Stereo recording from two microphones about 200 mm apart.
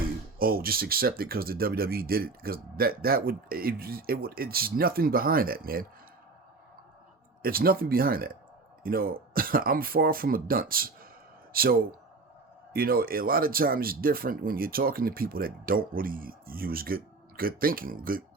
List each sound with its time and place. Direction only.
0.3 s speech: 45° right (ahead or behind)
7.4 s speech: 45° right (ahead or behind)